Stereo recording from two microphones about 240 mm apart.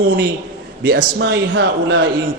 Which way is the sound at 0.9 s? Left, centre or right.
Right.